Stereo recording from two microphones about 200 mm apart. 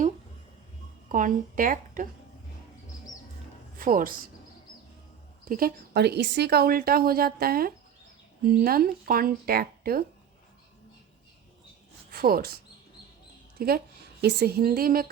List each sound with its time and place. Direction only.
1.1 s speech: 40° right (ahead or behind)
3.8 s speech: 45° right (ahead or behind)
5.5 s speech: 45° right (ahead or behind)
12.1 s speech: 50° right (ahead or behind)
13.6 s a woman's voice: 50° right (ahead or behind)